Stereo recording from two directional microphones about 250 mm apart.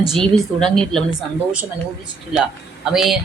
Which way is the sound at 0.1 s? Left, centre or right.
Centre.